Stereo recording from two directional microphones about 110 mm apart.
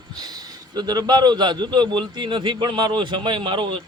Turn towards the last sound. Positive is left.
turn(degrees=-50)  # may be behind; listen again after turning